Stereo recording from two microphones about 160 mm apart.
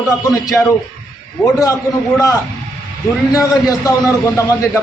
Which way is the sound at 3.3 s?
20° left (ahead or behind).